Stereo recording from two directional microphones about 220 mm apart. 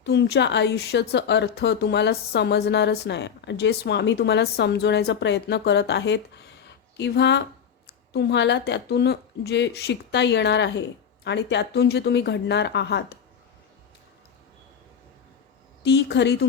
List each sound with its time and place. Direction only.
0.0 s a woman's voice: 50° left (ahead or behind)
15.8 s a woman's voice: 50° left (ahead or behind)